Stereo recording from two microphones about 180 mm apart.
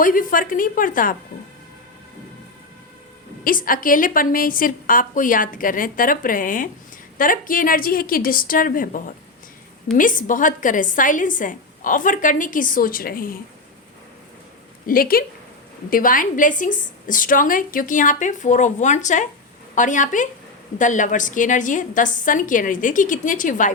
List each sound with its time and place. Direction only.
0.0 s a woman's voice: 50° left (ahead or behind)
3.4 s a woman's voice: 50° left (ahead or behind)
14.8 s a woman's voice: 55° left (ahead or behind)